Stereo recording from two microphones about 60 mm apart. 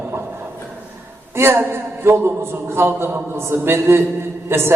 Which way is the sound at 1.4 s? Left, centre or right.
Right.